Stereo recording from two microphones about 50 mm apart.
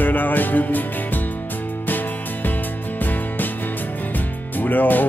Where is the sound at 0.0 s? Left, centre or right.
Left.